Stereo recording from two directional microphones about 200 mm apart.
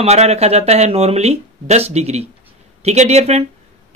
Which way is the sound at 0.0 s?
30° right (ahead or behind).